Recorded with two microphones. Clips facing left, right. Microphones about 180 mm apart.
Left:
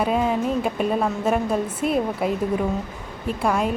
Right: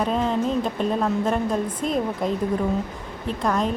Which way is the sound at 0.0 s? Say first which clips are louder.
Left 1 dB; 10° left (ahead or behind).